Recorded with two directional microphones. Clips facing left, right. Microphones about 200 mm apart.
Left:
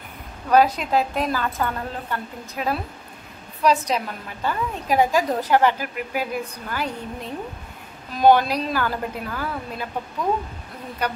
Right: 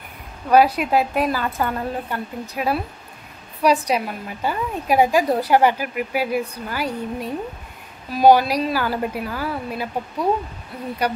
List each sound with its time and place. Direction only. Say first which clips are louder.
0.5 s a woman's voice: right 2 dB; 10° right (ahead or behind)
11.0 s a woman's voice: right 3 dB; 10° right (ahead or behind)